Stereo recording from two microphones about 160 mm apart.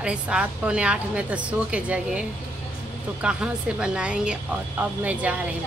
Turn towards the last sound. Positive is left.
turn(degrees=-10)  # may be behind; listen again after turning